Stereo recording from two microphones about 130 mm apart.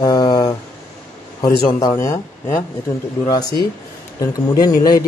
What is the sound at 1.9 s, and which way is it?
A man's voice, 20° left (ahead or behind).